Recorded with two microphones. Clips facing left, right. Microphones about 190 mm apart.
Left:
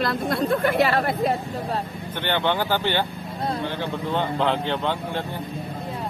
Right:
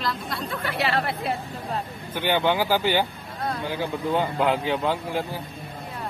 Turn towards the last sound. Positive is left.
turn(degrees=-5)  # may be behind; listen again after turning